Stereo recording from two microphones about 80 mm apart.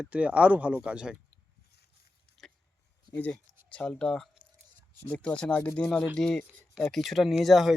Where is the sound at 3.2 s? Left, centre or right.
Centre.